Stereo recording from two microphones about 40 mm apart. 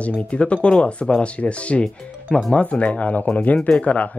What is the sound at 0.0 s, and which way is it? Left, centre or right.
Speech, left.